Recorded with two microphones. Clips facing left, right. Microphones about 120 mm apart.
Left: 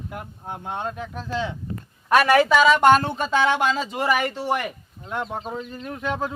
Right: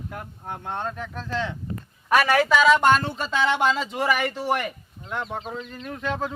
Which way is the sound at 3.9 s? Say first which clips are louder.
Left 1 dB; 5° left (ahead or behind).